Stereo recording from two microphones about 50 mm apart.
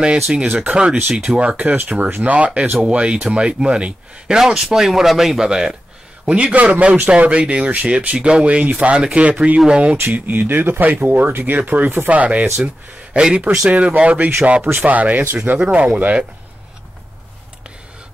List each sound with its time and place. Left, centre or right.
0.0 s speech: centre
1.4 s speech: right; by 5.8 s centre
6.2 s speech: right
9.9 s speech: right; by 13.7 s centre
13.7 s speech: right
14.6 s speech: right